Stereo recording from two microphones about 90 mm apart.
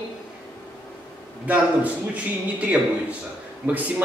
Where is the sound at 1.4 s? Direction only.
15° right (ahead or behind).